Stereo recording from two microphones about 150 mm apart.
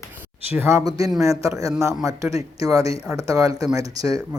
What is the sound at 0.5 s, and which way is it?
Speech, 15° right (ahead or behind).